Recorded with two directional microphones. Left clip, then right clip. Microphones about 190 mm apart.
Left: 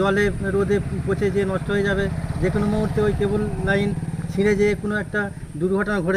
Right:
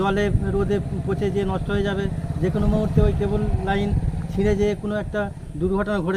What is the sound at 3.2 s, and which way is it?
Speech, centre (ahead or behind).